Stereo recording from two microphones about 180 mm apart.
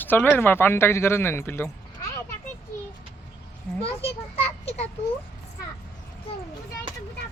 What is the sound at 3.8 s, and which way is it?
Speech, 30° left (ahead or behind).